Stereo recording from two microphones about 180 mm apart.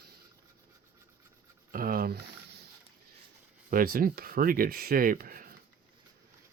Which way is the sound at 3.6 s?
55° right (ahead or behind).